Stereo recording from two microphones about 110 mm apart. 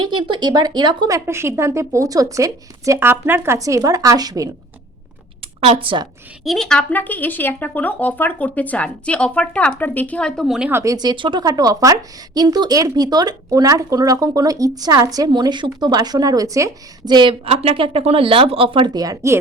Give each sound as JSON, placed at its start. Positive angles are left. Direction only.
{"t": 0.0, "sound": "a woman's voice", "side_deg": -45}
{"t": 1.1, "sound": "speech", "side_deg": -25}
{"t": 5.5, "sound": "speech", "side_deg": -55}
{"t": 6.4, "sound": "speech", "side_deg": 0}
{"t": 10.4, "sound": "a woman's voice", "side_deg": 0}
{"t": 10.7, "sound": "speech", "side_deg": -20}
{"t": 10.9, "sound": "a woman's voice", "side_deg": -40}
{"t": 17.2, "sound": "speech", "side_deg": -55}
{"t": 18.9, "sound": "a woman's voice", "side_deg": -35}